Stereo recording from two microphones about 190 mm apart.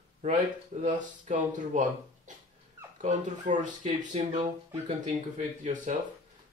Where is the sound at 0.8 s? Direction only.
40° right (ahead or behind).